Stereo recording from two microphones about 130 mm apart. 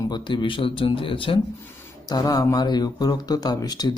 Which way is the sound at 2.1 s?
30° left (ahead or behind).